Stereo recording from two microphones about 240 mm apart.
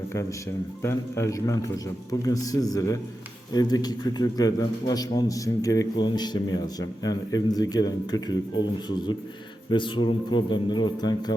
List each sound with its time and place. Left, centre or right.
0.8 s a man's voice: centre
9.6 s speech: centre